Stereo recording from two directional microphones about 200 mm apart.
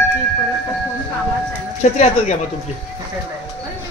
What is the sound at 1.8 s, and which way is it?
Speech, 35° left (ahead or behind).